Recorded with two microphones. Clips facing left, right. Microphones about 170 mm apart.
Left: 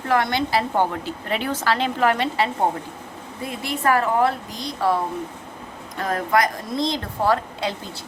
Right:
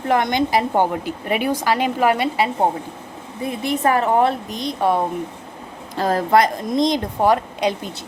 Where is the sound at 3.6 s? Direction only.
20° right (ahead or behind).